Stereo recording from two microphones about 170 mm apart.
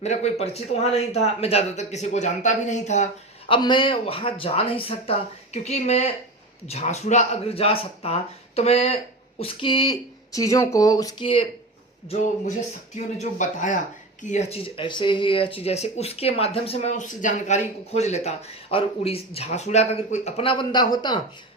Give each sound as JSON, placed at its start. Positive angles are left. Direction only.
{"t": 0.0, "sound": "speech", "side_deg": 40}
{"t": 3.5, "sound": "speech", "side_deg": 30}
{"t": 12.0, "sound": "speech", "side_deg": 40}